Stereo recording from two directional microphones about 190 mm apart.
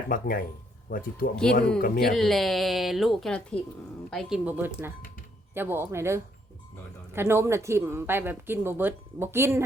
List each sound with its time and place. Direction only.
0.1 s speech: 50° left (ahead or behind)
2.1 s speech: centre (ahead or behind)
4.4 s speech: 10° right (ahead or behind)